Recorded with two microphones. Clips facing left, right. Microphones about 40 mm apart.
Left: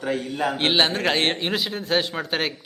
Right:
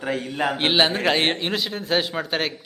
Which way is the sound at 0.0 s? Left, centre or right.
Right.